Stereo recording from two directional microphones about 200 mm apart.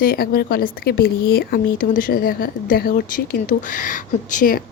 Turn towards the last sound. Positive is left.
turn(degrees=40)  # may be behind; listen again after turning